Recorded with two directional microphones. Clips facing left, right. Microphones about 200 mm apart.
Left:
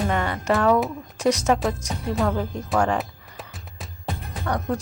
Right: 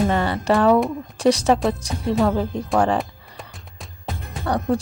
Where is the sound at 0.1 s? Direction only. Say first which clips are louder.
Right 3 dB; 30° right (ahead or behind).